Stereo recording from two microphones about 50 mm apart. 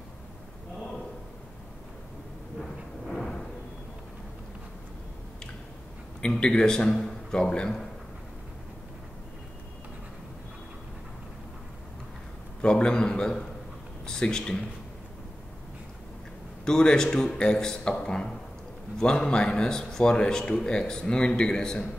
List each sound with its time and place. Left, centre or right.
2.6 s thunder: centre
6.4 s speech: centre
12.6 s a man's voice: centre
16.6 s speech: centre